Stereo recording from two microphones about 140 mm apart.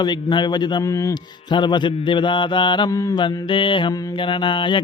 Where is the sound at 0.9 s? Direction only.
20° left (ahead or behind).